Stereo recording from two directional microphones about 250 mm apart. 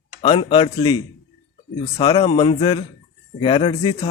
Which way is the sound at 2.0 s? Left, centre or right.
Left.